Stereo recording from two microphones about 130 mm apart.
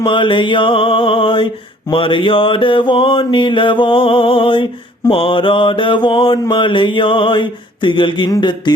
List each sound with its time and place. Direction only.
0.0 s mantra: 40° left (ahead or behind)